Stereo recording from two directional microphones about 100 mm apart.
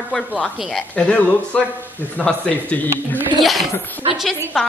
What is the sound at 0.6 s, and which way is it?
Speech, 5° right (ahead or behind).